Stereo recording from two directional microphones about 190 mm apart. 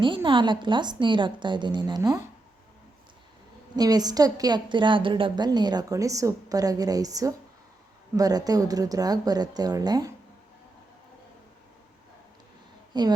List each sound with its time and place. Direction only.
0.0 s a woman's voice: 25° right (ahead or behind)
3.8 s a woman's voice: 20° right (ahead or behind)
12.9 s a woman's voice: 20° right (ahead or behind)